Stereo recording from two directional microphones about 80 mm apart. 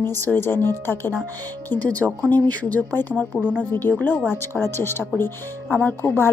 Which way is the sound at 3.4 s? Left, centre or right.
Centre.